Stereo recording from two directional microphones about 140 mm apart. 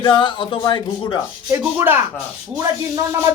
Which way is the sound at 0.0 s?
35° left (ahead or behind).